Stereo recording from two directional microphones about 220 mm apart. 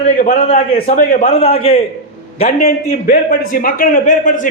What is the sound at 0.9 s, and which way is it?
Speech, 40° left (ahead or behind).